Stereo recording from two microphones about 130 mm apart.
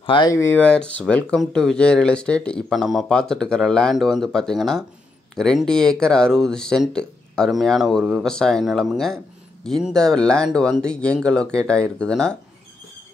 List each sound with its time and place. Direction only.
0.0 s speech: 40° left (ahead or behind)
0.3 s speech: 20° left (ahead or behind)